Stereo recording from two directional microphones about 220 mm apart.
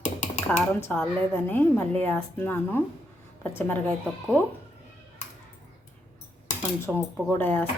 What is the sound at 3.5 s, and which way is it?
Speech, 10° left (ahead or behind).